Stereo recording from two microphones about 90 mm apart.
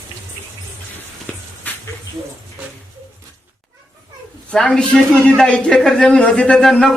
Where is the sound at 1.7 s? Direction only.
20° left (ahead or behind).